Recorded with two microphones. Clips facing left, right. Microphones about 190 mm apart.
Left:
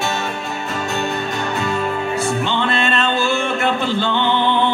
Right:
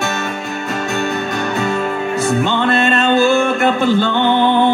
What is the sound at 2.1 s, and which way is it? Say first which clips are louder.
Music: right 6 dB; 45° right (ahead or behind).